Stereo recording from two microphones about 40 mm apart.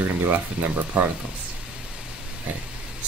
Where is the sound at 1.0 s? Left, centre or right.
Right.